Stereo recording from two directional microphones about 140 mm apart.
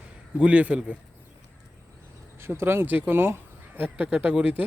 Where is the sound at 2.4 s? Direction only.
15° right (ahead or behind).